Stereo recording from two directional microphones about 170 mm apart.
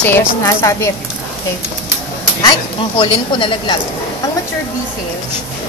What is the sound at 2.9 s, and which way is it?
Speech, 30° left (ahead or behind).